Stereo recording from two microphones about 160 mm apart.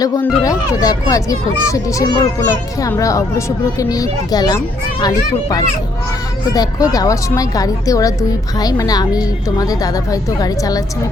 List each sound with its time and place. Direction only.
0.4 s a child's voice: 20° left (ahead or behind)